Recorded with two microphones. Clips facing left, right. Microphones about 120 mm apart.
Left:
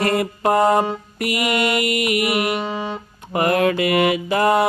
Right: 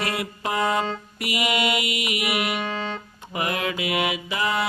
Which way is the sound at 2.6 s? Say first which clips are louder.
Left 3 dB; 15° left (ahead or behind).